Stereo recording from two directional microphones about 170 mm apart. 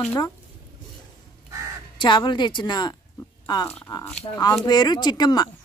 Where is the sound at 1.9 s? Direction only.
25° left (ahead or behind).